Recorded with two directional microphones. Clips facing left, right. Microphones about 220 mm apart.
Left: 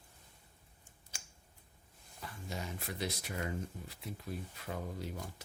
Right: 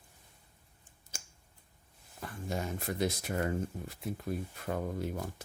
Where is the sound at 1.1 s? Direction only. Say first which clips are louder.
Right 5 dB; 45° right (ahead or behind).